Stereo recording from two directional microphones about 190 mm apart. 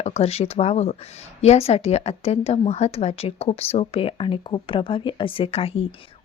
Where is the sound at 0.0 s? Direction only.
35° left (ahead or behind).